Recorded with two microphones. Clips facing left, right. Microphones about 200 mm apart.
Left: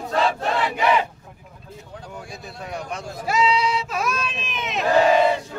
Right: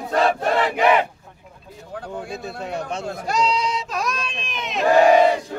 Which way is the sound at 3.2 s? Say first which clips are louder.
Left 2 dB; 5° left (ahead or behind).